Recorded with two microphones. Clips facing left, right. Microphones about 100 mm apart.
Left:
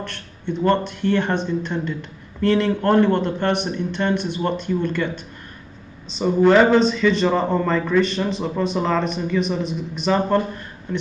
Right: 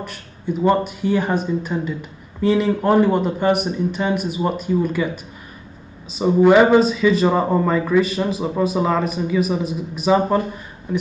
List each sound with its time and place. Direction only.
0.0 s a man's voice: 5° right (ahead or behind)